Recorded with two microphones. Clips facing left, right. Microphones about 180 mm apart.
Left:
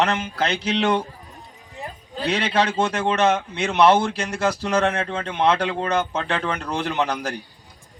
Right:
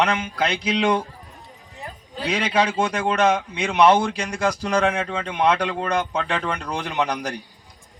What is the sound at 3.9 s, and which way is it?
A man's voice, 5° left (ahead or behind).